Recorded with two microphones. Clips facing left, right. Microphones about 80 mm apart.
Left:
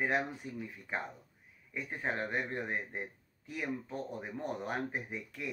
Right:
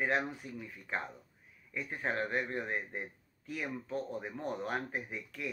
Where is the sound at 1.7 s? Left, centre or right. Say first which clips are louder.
Right 1 dB; centre.